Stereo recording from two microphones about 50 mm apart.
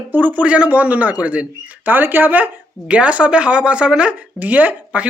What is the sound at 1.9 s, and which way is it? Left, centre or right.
Speech, right.